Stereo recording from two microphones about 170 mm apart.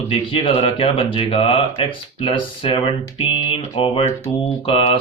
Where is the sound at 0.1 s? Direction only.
30° left (ahead or behind).